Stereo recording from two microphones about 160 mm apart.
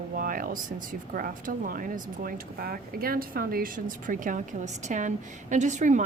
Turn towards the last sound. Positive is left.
turn(degrees=-50)  # may be behind; listen again after turning